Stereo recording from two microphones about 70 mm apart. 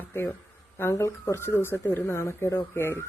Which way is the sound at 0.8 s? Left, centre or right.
Left.